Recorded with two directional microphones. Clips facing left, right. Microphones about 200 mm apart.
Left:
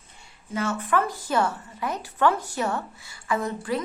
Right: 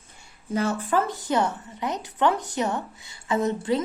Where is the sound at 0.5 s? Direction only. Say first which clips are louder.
Right 1 dB; 35° right (ahead or behind).